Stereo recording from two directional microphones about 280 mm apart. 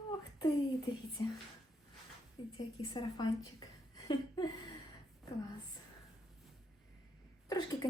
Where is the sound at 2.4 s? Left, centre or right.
Centre.